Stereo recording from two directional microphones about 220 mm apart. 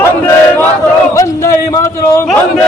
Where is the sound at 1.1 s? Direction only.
15° left (ahead or behind).